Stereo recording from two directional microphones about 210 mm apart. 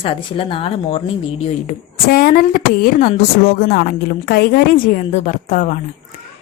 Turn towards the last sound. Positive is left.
turn(degrees=40)  # may be behind; listen again after turning